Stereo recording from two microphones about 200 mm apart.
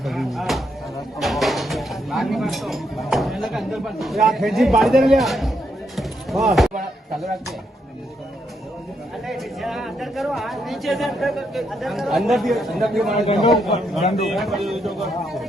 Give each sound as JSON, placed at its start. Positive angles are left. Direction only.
{"t": 0.0, "sound": "speech", "side_deg": 0}
{"t": 6.0, "sound": "music", "side_deg": 0}
{"t": 9.2, "sound": "speech", "side_deg": 0}